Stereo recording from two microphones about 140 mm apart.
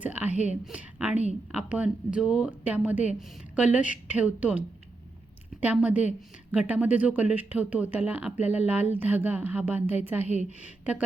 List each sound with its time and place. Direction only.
0.0 s speech: 10° right (ahead or behind)
10.2 s a woman's voice: 50° left (ahead or behind)